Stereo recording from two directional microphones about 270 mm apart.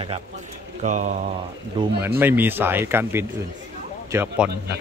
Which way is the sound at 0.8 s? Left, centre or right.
Right.